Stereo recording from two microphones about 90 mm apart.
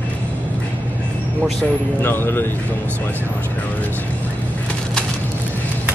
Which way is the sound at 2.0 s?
25° left (ahead or behind).